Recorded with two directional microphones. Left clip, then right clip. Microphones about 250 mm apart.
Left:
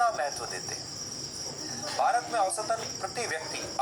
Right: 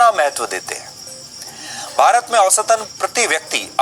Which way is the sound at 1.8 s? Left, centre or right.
Right.